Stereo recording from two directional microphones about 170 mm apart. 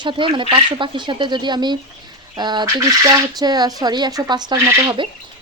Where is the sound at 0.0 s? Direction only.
30° right (ahead or behind).